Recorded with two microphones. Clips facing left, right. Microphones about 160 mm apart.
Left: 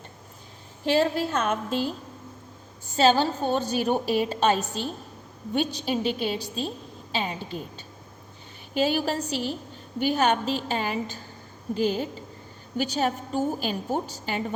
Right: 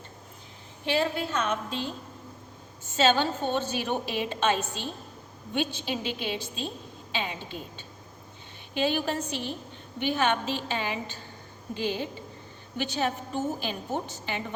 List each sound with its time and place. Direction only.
0.9 s a woman's voice: 40° left (ahead or behind)
2.9 s a woman's voice: 35° left (ahead or behind)